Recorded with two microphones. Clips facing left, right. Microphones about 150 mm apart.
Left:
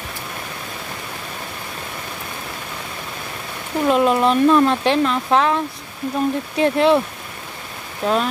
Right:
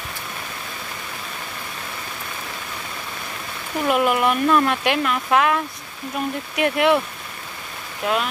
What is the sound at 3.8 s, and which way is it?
Speech, 25° left (ahead or behind).